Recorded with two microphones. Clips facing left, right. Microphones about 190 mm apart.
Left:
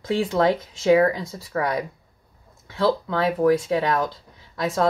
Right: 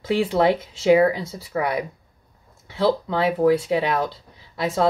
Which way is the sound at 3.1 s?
20° right (ahead or behind).